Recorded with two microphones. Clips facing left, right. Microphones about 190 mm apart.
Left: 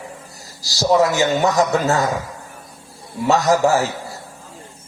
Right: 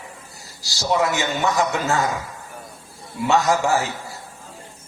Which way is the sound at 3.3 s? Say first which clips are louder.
Left 3 dB; 40° left (ahead or behind).